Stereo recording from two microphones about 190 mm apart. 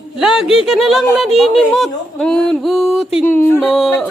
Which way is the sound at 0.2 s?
5° right (ahead or behind).